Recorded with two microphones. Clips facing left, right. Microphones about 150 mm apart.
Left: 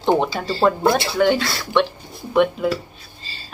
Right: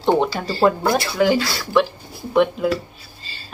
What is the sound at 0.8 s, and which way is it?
Speech, 25° left (ahead or behind).